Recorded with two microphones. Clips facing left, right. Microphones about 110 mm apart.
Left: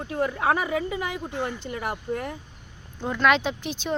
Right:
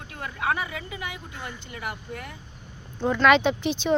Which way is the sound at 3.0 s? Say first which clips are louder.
Right 3 dB; centre (ahead or behind).